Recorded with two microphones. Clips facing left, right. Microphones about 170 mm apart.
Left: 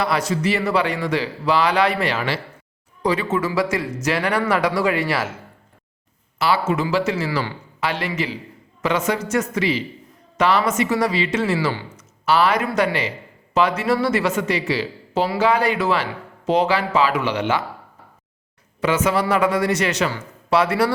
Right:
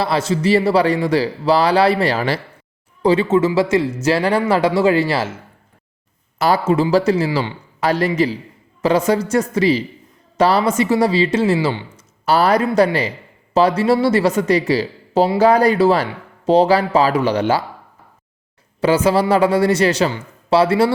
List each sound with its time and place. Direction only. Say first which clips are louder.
0.0 s a man's voice: right 3 dB; 30° right (ahead or behind)
6.4 s a man's voice: right 5 dB; 35° right (ahead or behind)
12.2 s a man's voice: right 3 dB; 40° right (ahead or behind)
18.8 s a man's voice: right 5 dB; 35° right (ahead or behind)